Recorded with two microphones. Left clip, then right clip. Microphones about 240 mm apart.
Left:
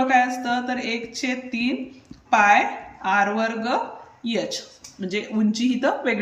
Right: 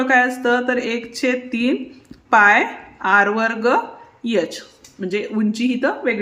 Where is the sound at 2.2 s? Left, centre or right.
Centre.